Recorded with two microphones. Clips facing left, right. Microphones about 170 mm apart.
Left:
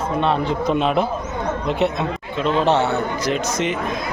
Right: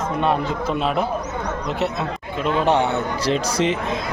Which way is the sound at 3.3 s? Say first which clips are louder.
Right 3 dB; 30° right (ahead or behind).